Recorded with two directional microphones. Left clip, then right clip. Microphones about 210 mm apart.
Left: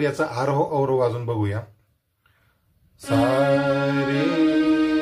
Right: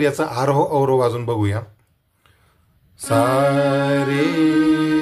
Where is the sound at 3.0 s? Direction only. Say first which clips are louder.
Right 3 dB; 35° right (ahead or behind).